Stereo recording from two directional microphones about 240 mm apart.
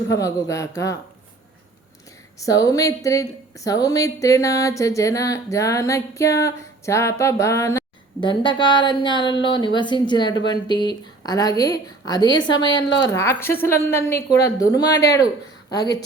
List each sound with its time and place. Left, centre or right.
0.1 s a woman's voice: centre
2.4 s a woman's voice: centre